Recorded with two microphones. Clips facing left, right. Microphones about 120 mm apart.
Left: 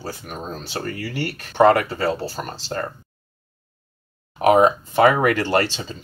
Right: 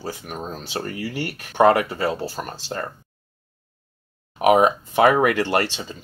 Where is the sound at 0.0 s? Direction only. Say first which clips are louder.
Right 1 dB; 15° right (ahead or behind).